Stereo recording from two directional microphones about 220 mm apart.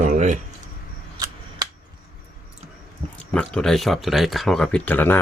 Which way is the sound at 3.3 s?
5° left (ahead or behind).